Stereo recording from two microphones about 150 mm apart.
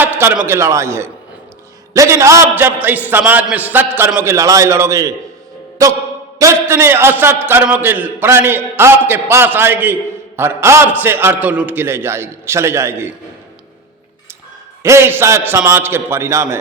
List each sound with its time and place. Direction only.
0.0 s a sound: 15° right (ahead or behind)
0.4 s a man's voice: 20° right (ahead or behind)
14.8 s a man's voice: 20° right (ahead or behind)